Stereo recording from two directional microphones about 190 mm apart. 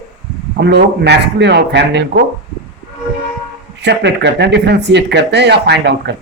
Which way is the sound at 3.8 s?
65° right (ahead or behind).